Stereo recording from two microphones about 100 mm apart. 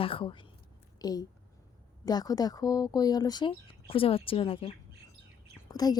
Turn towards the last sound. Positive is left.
turn(degrees=40)  # may be behind; listen again after turning